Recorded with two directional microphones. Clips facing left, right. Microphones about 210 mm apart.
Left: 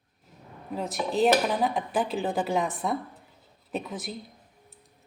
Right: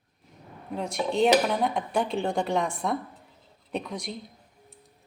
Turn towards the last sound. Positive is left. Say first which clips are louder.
# right 1 dB
turn(degrees=5)  # may be behind; listen again after turning